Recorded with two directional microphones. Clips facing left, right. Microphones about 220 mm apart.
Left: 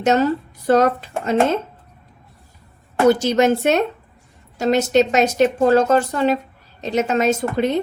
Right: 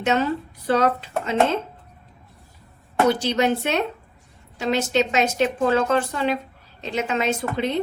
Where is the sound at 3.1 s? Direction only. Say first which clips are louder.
Left 7 dB; 45° left (ahead or behind).